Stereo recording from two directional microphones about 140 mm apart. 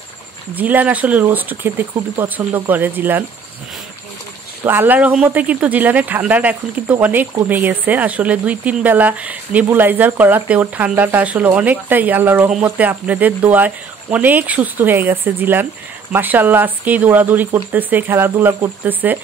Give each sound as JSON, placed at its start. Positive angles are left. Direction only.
{"t": 0.6, "sound": "a woman's voice", "side_deg": -10}
{"t": 4.6, "sound": "a woman's voice", "side_deg": -15}